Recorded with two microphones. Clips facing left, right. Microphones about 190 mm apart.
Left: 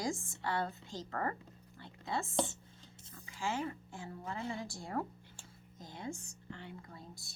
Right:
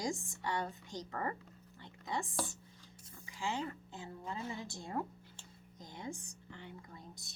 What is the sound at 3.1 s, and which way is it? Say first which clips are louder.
A woman's voice: left 1 dB; 20° right (ahead or behind).